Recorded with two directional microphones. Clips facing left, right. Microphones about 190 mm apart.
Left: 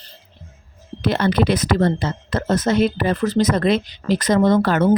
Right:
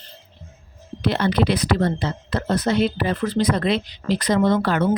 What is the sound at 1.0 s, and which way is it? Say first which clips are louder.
A woman's voice: left 2 dB; 50° left (ahead or behind).